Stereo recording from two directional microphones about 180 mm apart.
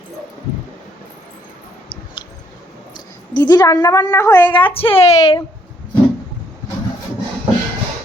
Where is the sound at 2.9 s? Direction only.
25° left (ahead or behind).